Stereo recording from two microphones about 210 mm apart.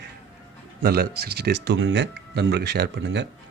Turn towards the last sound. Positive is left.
turn(degrees=-55)  # may be behind; listen again after turning